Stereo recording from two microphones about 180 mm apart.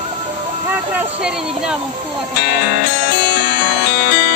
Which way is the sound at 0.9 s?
5° right (ahead or behind).